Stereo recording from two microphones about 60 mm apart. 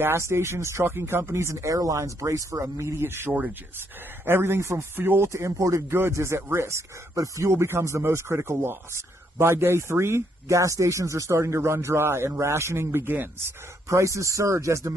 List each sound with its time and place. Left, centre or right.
0.0 s speech: right
2.6 s speech: right
3.3 s speech: right
4.3 s speech: right
4.9 s speech: right
5.3 s speech: right
5.9 s speech: right
13.8 s speech: right